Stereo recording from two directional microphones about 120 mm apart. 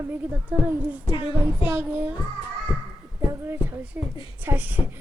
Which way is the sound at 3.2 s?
25° right (ahead or behind).